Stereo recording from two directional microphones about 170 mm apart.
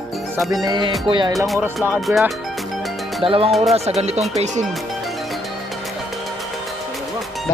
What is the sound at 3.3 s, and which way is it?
Speech, 35° right (ahead or behind).